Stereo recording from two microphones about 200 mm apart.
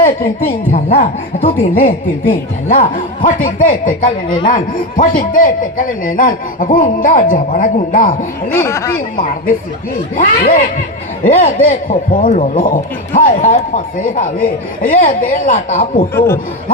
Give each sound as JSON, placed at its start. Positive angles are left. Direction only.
{"t": 0.0, "sound": "a man's voice", "side_deg": 40}
{"t": 8.4, "sound": "speech", "side_deg": 10}
{"t": 10.2, "sound": "a man's voice", "side_deg": 40}
{"t": 16.1, "sound": "speech", "side_deg": 15}